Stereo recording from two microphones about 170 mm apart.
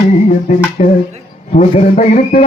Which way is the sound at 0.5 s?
40° left (ahead or behind).